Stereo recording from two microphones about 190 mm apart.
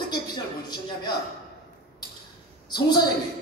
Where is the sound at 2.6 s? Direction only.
20° left (ahead or behind).